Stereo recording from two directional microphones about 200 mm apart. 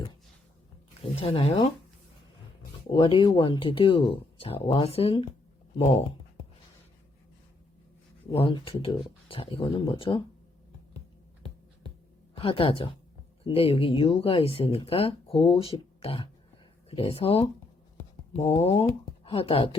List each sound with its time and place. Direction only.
1.2 s speech: 25° left (ahead or behind)
2.9 s speech: 25° left (ahead or behind)
8.3 s speech: 30° left (ahead or behind)
12.3 s speech: 25° left (ahead or behind)